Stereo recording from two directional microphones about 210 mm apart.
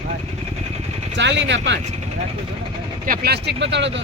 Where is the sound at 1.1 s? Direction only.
55° right (ahead or behind).